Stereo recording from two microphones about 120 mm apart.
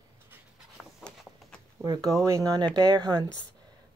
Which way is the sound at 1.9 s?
30° right (ahead or behind).